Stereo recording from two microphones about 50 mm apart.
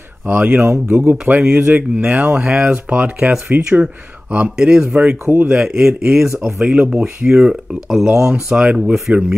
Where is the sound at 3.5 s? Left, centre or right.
Right.